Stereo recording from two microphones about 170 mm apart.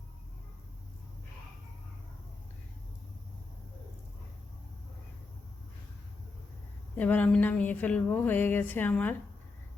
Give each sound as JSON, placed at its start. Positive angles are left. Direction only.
{"t": 6.9, "sound": "speech", "side_deg": 10}